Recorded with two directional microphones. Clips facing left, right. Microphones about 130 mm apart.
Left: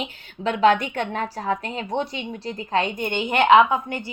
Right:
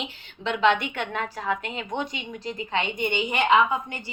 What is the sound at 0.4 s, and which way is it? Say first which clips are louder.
A woman's voice: left 4 dB; 45° left (ahead or behind).